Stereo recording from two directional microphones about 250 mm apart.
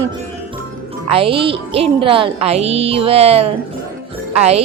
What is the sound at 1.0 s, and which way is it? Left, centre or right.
Speech, right.